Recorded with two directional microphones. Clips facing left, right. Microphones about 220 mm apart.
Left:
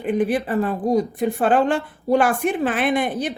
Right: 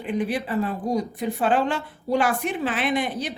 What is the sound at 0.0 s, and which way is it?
Speech, 50° left (ahead or behind).